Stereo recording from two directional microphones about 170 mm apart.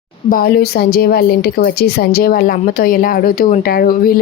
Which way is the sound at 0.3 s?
60° left (ahead or behind).